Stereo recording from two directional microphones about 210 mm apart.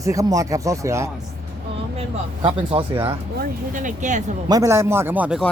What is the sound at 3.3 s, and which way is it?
Speech, 40° right (ahead or behind).